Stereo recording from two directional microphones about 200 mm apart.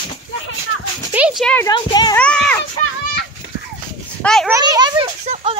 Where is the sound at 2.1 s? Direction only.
5° left (ahead or behind).